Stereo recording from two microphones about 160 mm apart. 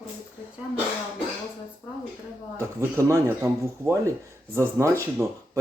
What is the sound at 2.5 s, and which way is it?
Speech, 15° right (ahead or behind).